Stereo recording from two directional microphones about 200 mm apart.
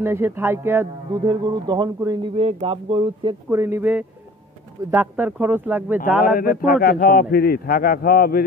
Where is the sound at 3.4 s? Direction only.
10° right (ahead or behind).